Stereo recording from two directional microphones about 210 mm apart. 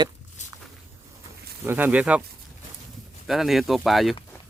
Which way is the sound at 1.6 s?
10° right (ahead or behind).